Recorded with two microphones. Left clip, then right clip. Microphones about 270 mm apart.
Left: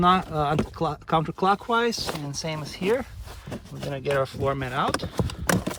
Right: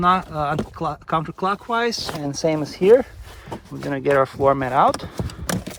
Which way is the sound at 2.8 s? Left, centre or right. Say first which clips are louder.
Right 11 dB; right.